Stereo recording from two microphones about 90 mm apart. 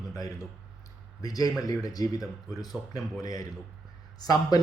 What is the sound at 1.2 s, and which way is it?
Speech, 45° left (ahead or behind).